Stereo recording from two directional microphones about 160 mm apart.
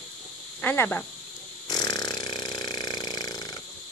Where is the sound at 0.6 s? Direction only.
15° left (ahead or behind).